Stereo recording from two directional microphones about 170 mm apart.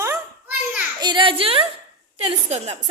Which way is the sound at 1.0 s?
25° right (ahead or behind).